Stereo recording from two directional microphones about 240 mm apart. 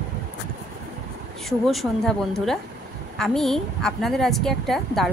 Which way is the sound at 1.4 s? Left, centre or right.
Centre.